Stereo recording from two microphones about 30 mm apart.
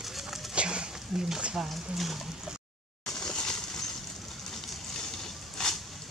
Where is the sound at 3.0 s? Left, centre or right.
Left.